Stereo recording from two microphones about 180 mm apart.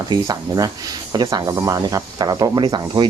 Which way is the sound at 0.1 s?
20° right (ahead or behind).